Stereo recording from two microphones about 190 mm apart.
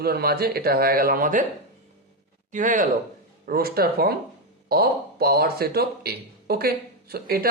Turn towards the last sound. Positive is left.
turn(degrees=-55)  # may be behind; listen again after turning